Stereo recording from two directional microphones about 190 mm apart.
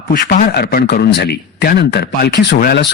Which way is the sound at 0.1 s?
45° left (ahead or behind).